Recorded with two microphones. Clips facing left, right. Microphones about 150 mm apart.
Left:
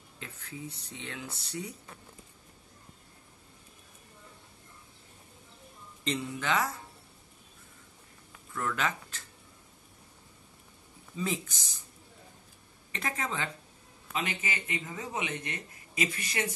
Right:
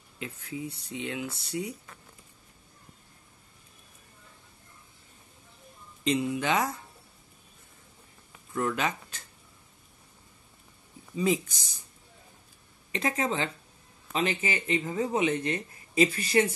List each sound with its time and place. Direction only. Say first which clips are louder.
0.2 s speech: right 6 dB; 10° right (ahead or behind)
6.0 s speech: right 5 dB; 15° right (ahead or behind)
8.5 s speech: right 3 dB; 20° right (ahead or behind)
11.1 s speech: right 7 dB; 15° right (ahead or behind)
12.9 s speech: right 6 dB; 20° right (ahead or behind)